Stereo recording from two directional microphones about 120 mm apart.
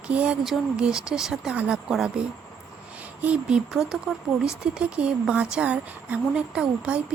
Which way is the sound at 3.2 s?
10° right (ahead or behind).